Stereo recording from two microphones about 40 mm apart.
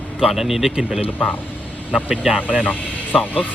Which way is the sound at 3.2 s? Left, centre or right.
Left.